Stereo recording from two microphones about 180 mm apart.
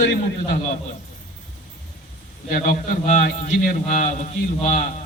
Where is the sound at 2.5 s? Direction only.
45° left (ahead or behind).